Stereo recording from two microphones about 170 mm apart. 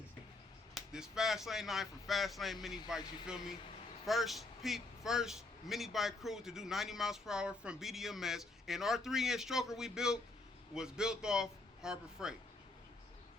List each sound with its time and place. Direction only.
0.7 s speech: 5° right (ahead or behind)